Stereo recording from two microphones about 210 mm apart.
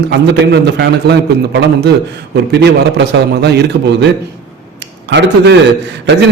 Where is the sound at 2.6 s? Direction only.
50° right (ahead or behind).